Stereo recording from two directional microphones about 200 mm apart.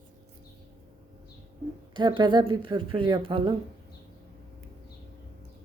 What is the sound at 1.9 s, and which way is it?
A woman's voice, 25° right (ahead or behind).